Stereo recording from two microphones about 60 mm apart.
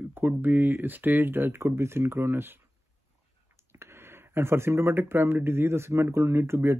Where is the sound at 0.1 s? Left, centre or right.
Right.